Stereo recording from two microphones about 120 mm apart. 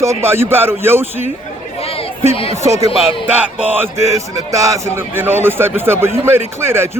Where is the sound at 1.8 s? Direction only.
55° left (ahead or behind).